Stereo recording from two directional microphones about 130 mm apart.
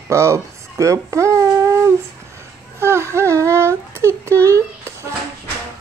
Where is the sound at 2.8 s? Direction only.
20° right (ahead or behind).